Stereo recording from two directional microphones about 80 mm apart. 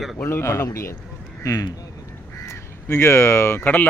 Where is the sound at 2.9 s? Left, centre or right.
Left.